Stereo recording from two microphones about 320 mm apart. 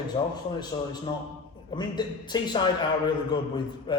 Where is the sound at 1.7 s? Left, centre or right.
Centre.